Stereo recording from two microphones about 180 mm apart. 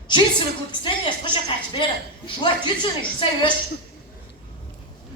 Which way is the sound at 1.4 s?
25° left (ahead or behind).